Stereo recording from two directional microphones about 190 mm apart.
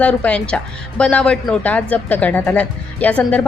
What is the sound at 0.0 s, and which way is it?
A woman's voice, 5° left (ahead or behind).